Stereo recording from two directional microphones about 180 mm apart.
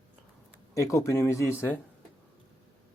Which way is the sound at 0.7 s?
15° left (ahead or behind).